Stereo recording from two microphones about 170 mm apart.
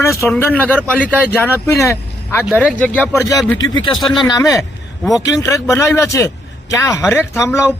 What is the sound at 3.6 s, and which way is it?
Speech, 30° left (ahead or behind).